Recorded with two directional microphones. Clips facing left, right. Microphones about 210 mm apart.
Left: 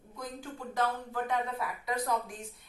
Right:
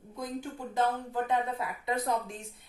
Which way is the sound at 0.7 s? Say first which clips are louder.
Right 3 dB; 20° right (ahead or behind).